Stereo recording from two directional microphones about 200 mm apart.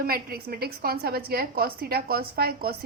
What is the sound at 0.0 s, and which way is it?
A woman's voice, 50° right (ahead or behind).